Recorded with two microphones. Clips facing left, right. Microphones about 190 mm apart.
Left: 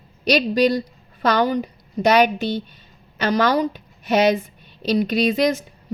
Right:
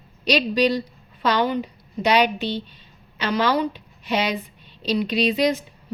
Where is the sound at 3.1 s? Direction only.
45° left (ahead or behind).